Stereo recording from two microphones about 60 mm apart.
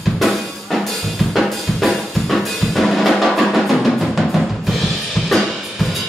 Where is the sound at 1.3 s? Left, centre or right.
Centre.